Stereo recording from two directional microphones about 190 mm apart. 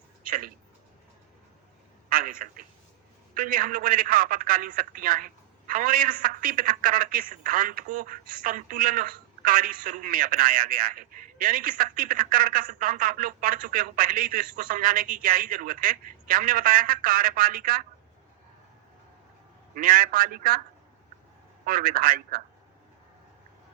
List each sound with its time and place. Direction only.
0.2 s speech: 50° right (ahead or behind)
2.0 s a man's voice: 50° right (ahead or behind)
19.7 s a man's voice: 50° right (ahead or behind)
21.6 s a man's voice: 50° right (ahead or behind)